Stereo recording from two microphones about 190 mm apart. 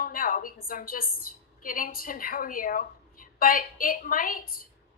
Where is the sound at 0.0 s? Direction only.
45° left (ahead or behind).